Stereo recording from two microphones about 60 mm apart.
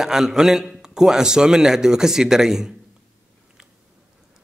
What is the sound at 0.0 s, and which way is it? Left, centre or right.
Speech, centre.